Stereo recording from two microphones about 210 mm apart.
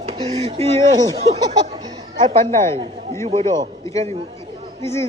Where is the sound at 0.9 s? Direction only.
20° right (ahead or behind).